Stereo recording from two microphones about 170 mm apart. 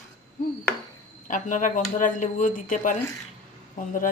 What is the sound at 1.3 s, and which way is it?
A woman's voice, 50° left (ahead or behind).